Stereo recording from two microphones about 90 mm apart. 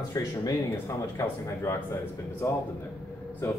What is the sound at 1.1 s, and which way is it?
Speech, 30° left (ahead or behind).